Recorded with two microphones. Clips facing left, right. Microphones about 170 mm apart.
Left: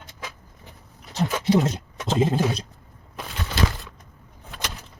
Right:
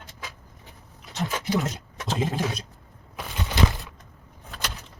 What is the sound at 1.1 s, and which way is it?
Speech, 30° left (ahead or behind).